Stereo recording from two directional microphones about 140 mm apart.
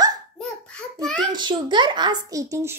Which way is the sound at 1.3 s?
35° right (ahead or behind).